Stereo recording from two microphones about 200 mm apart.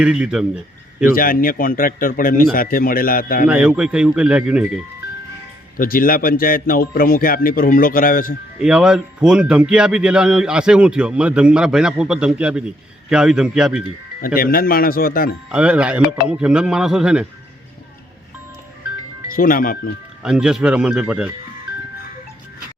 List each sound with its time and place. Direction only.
0.0 s a man's voice: 5° right (ahead or behind)
1.1 s a man's voice: 45° left (ahead or behind)
3.4 s a man's voice: 5° right (ahead or behind)
5.7 s a man's voice: 45° left (ahead or behind)
8.5 s a man's voice: 5° right (ahead or behind)
14.3 s a man's voice: 45° left (ahead or behind)
15.5 s a man's voice: 5° right (ahead or behind)
19.4 s a man's voice: 45° left (ahead or behind)
20.2 s a man's voice: 5° right (ahead or behind)